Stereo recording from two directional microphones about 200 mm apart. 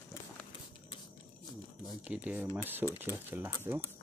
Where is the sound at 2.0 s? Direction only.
5° right (ahead or behind).